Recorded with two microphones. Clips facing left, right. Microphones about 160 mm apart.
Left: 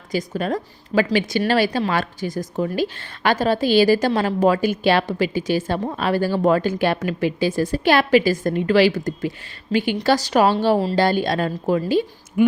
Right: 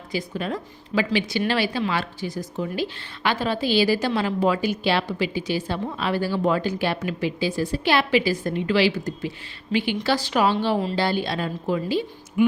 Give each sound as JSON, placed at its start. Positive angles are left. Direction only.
{"t": 0.1, "sound": "a woman's voice", "side_deg": 45}